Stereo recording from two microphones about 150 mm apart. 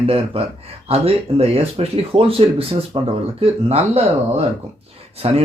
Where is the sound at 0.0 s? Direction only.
40° right (ahead or behind).